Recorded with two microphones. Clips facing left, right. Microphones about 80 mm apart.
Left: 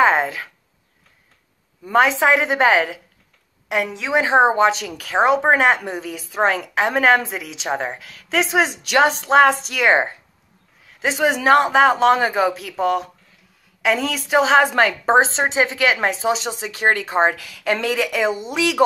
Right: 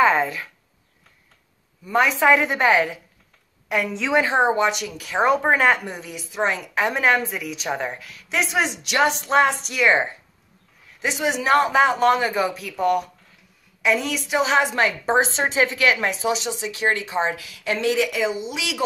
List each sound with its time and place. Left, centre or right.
0.0 s a sound: left
2.1 s a woman's voice: centre; by 3.0 s left
3.9 s a woman's voice: centre
4.2 s a woman's voice: left
5.2 s a woman's voice: left
5.9 s a woman's voice: left
11.5 s a woman's voice: left